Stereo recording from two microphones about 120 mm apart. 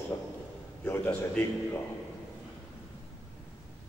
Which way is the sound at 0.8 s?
20° left (ahead or behind).